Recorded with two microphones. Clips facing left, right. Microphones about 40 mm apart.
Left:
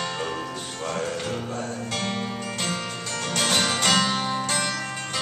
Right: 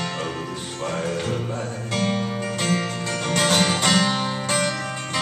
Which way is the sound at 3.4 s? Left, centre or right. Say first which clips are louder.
Right 3 dB; centre.